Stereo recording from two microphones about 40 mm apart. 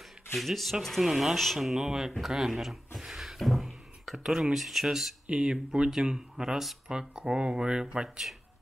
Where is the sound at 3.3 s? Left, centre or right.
Centre.